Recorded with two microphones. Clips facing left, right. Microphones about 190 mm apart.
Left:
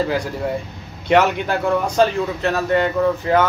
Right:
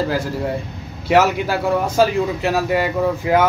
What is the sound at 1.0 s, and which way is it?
A man's voice, 5° right (ahead or behind).